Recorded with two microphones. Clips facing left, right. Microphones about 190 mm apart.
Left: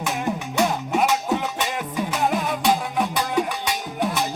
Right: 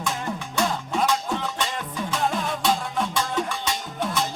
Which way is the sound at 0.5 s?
20° left (ahead or behind).